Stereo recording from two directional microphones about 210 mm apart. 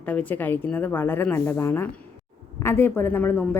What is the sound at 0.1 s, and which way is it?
A woman's voice, 5° left (ahead or behind).